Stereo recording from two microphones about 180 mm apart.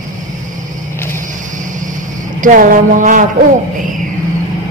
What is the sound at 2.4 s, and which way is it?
Speech, 50° right (ahead or behind).